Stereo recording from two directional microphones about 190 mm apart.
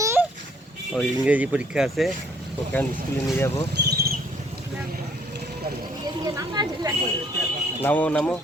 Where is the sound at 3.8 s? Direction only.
55° right (ahead or behind).